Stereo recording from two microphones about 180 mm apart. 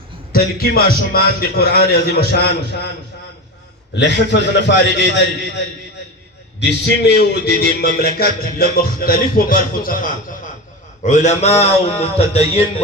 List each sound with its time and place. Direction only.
0.3 s a man's voice: 55° left (ahead or behind)
3.9 s a man's voice: 75° left (ahead or behind)
6.6 s a man's voice: 65° left (ahead or behind); by 10.1 s 50° left (ahead or behind)
11.0 s a man's voice: 40° left (ahead or behind)